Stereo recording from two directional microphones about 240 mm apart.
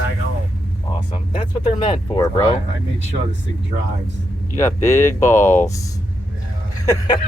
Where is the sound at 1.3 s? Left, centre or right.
Left.